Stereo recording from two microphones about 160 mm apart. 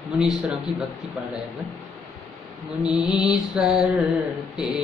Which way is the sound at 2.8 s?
5° right (ahead or behind).